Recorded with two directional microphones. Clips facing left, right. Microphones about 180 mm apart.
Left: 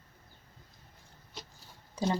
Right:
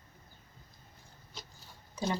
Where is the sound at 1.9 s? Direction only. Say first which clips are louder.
Left 3 dB; 35° left (ahead or behind).